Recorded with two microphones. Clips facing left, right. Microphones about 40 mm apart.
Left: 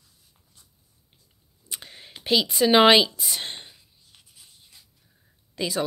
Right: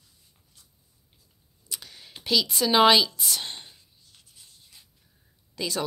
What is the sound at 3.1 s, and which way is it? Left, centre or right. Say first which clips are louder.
Speech: right 1 dB; centre.